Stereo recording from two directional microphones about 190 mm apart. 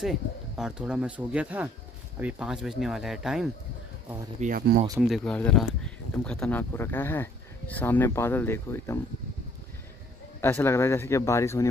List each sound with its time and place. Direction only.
0.6 s speech: 5° right (ahead or behind)
4.4 s speech: 45° right (ahead or behind)
5.0 s speech: centre (ahead or behind)
10.4 s speech: 15° left (ahead or behind)